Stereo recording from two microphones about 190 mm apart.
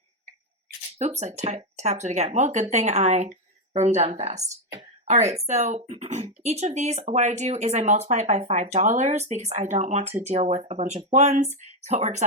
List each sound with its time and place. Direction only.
0.9 s speech: 35° right (ahead or behind)